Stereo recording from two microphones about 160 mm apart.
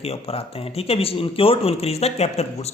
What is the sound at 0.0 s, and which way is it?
A man's voice, 40° left (ahead or behind).